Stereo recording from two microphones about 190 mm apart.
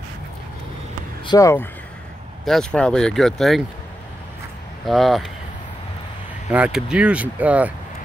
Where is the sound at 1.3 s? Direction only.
15° left (ahead or behind).